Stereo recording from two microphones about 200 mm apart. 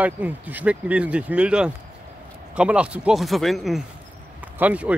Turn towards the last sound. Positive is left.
turn(degrees=-5)  # may be behind; listen again after turning